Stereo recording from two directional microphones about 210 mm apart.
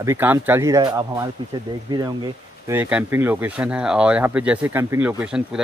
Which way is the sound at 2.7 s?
10° right (ahead or behind).